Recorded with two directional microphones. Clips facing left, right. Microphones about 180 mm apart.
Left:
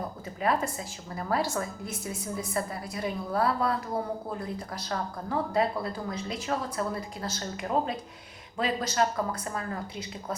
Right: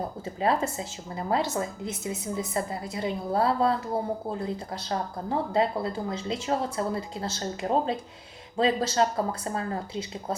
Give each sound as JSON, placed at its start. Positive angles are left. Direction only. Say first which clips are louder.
{"t": 0.4, "sound": "speech", "louder": "right 2 dB", "side_deg": -25}